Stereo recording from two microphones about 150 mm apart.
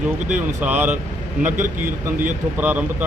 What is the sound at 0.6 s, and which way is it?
Speech, 10° right (ahead or behind).